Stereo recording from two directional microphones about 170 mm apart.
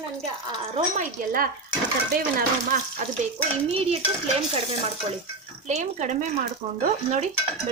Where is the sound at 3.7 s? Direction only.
35° right (ahead or behind).